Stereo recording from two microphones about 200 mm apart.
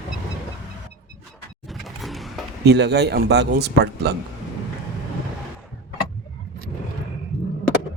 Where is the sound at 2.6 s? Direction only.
60° right (ahead or behind).